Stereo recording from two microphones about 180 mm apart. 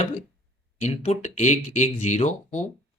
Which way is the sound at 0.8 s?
40° left (ahead or behind).